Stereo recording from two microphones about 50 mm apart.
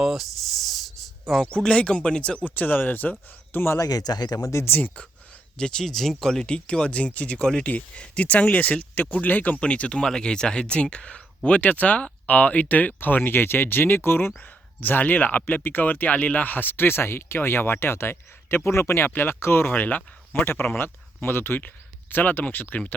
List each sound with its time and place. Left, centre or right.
0.0 s a sound: centre
1.5 s speech: centre
2.4 s speech: left
4.5 s speech: left
5.5 s speech: centre; by 14.3 s left
14.8 s speech: left
19.1 s speech: left